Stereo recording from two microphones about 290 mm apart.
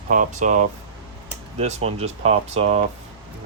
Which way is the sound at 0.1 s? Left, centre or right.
Right.